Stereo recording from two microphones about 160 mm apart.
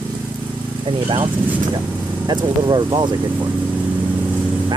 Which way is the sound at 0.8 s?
30° right (ahead or behind).